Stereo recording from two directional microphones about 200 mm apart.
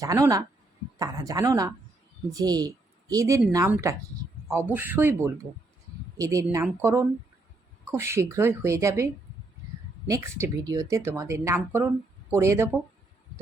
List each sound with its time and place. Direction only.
0.0 s speech: 15° right (ahead or behind)
10.1 s speech: 15° right (ahead or behind)